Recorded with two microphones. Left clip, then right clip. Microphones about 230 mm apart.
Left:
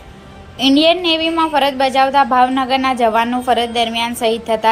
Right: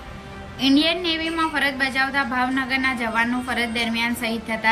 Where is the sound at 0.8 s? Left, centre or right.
Centre.